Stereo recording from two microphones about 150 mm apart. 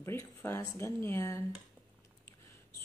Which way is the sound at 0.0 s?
15° left (ahead or behind).